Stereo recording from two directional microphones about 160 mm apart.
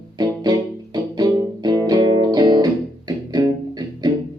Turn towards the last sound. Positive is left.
turn(degrees=-25)  # may be behind; listen again after turning